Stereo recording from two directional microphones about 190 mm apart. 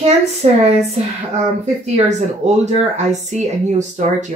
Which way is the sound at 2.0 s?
35° right (ahead or behind).